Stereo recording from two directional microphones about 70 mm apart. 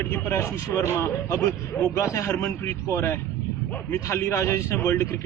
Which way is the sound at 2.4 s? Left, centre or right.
Left.